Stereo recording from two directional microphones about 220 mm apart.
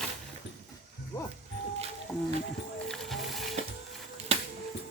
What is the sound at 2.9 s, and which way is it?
Music, centre (ahead or behind).